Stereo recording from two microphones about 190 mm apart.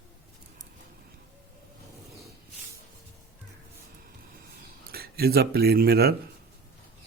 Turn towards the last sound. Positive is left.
turn(degrees=-55)  # may be behind; listen again after turning